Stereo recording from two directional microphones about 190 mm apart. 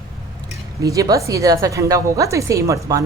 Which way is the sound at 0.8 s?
15° right (ahead or behind).